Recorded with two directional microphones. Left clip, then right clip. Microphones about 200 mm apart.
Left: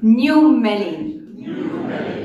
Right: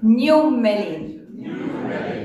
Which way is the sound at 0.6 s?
15° right (ahead or behind).